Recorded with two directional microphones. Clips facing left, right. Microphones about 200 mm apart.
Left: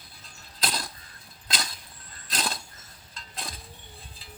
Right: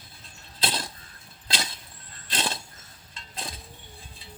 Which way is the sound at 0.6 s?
25° right (ahead or behind).